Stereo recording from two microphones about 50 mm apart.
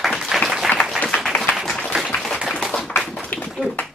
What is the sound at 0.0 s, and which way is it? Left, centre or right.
Applause, centre.